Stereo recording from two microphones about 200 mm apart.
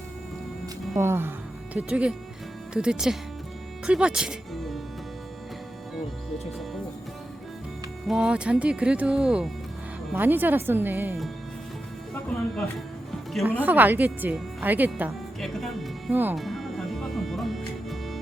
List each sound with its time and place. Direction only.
0.9 s speech: 10° right (ahead or behind)
8.0 s speech: 5° right (ahead or behind)
13.4 s speech: 10° right (ahead or behind)